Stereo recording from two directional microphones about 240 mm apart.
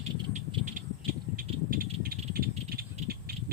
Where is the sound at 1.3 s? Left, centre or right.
Right.